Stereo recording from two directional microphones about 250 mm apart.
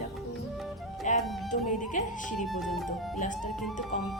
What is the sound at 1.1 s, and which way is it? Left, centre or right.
Music, left.